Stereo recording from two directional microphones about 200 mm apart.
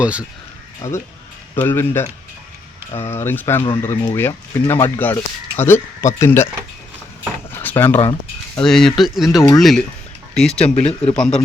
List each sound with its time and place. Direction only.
0.0 s speech: 5° right (ahead or behind)
0.8 s speech: 15° left (ahead or behind)
7.6 s speech: 10° left (ahead or behind)
10.8 s speech: 30° left (ahead or behind)
11.1 s speech: 5° left (ahead or behind)